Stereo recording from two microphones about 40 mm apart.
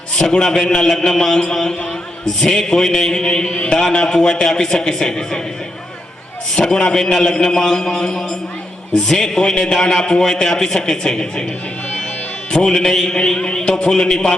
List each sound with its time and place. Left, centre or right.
0.2 s a man's voice: centre
6.5 s a man's voice: left
7.2 s mantra: left
7.4 s a man's voice: centre
12.6 s mantra: centre
13.9 s a man's voice: centre